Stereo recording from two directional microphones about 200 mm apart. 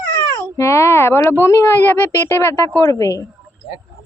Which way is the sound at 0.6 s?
15° left (ahead or behind).